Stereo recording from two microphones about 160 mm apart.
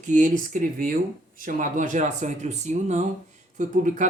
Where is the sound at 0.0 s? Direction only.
55° right (ahead or behind).